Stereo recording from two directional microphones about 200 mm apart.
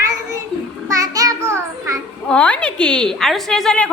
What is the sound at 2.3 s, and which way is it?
A woman's voice, 5° left (ahead or behind).